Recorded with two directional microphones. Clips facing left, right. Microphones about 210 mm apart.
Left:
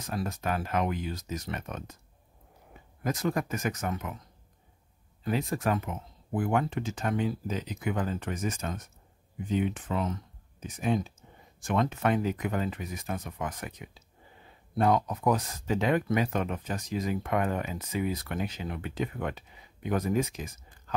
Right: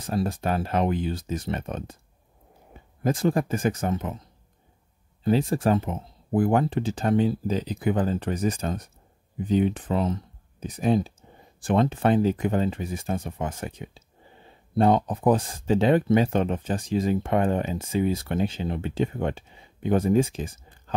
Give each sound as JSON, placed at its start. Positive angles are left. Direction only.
{"t": 0.0, "sound": "speech", "side_deg": -30}
{"t": 5.2, "sound": "speech", "side_deg": -30}